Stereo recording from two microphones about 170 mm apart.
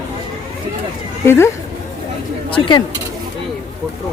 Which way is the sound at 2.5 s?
30° left (ahead or behind).